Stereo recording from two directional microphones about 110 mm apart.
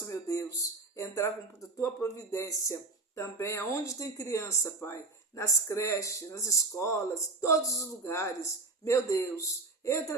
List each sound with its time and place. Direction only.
0.1 s a woman's voice: 30° left (ahead or behind)